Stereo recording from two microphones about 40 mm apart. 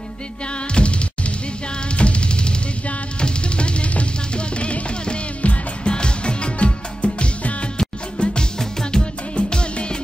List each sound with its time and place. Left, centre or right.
0.7 s music: left
9.4 s music: left